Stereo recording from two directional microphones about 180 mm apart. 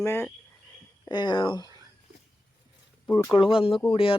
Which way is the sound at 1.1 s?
25° left (ahead or behind).